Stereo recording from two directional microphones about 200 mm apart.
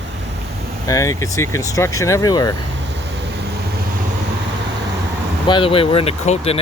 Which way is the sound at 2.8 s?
60° right (ahead or behind).